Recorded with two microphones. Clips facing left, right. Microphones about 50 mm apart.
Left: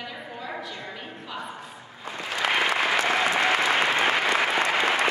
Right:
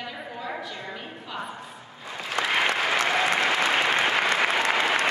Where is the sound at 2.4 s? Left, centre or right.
Right.